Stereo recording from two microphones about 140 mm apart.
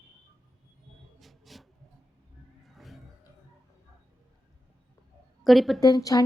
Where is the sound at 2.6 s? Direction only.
Centre (ahead or behind).